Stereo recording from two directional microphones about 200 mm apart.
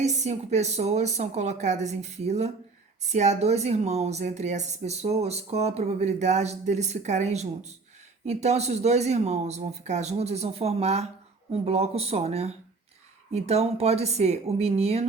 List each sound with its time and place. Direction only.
0.0 s speech: 35° right (ahead or behind)